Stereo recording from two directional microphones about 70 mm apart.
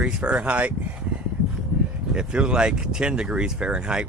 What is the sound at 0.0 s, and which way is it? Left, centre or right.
Speech, centre.